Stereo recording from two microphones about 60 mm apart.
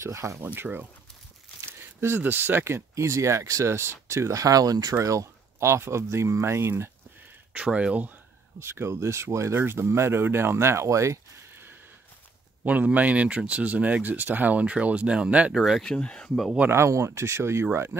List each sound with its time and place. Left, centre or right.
0.0 s speech: right
0.4 s speech: right
1.6 s a sound: right
2.2 s speech: right
2.6 s speech: right
5.0 s speech: right
7.5 s speech: centre
8.5 s speech: right
12.6 s speech: right
15.5 s speech: centre
15.8 s speech: centre
16.7 s speech: right